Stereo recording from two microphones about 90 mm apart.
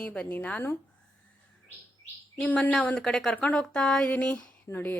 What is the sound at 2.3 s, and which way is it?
A woman's voice, 15° left (ahead or behind).